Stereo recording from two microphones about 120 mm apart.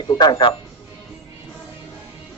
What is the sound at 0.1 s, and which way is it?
Speech, 35° left (ahead or behind).